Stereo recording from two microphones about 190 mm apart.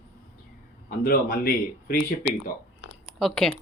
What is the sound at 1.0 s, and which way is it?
Speech, 50° left (ahead or behind).